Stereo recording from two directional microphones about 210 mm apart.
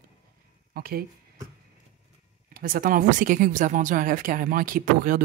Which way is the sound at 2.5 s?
45° right (ahead or behind).